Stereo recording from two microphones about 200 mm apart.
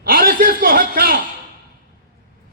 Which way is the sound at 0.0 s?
45° right (ahead or behind).